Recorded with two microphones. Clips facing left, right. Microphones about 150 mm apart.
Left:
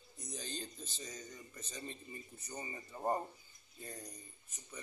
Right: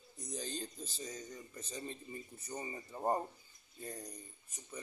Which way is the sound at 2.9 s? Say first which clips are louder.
Right 1 dB; 10° right (ahead or behind).